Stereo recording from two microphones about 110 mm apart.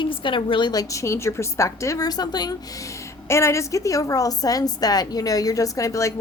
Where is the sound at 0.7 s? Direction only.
30° left (ahead or behind).